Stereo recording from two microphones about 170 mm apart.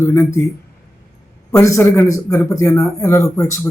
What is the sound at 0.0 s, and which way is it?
Speech, 15° left (ahead or behind).